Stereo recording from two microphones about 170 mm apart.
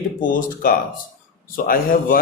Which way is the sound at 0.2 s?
50° left (ahead or behind).